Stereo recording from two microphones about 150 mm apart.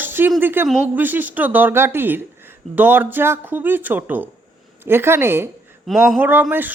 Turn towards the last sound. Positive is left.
turn(degrees=-10)  # may be behind; listen again after turning